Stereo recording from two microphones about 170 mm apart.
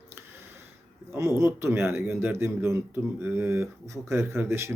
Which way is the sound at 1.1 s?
15° right (ahead or behind).